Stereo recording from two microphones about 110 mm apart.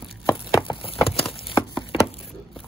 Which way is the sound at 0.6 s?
50° left (ahead or behind).